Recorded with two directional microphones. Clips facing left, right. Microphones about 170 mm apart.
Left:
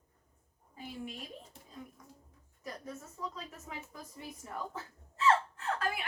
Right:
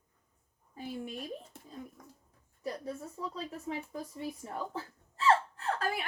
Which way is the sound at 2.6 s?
30° right (ahead or behind).